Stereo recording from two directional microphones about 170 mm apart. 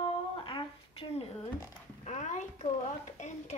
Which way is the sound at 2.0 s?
45° left (ahead or behind).